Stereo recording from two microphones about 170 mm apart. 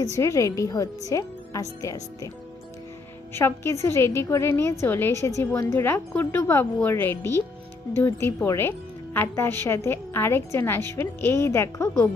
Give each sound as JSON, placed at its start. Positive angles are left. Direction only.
{"t": 0.1, "sound": "speech", "side_deg": 20}
{"t": 3.3, "sound": "a woman's voice", "side_deg": 15}